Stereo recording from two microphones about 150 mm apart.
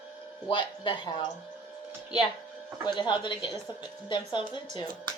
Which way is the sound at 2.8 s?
30° left (ahead or behind).